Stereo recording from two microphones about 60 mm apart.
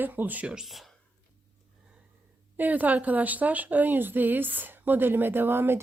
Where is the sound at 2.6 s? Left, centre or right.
Right.